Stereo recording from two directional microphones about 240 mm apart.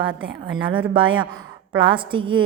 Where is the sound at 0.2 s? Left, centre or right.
Right.